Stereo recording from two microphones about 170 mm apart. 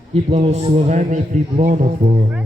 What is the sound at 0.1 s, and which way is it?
A man's voice, 35° right (ahead or behind).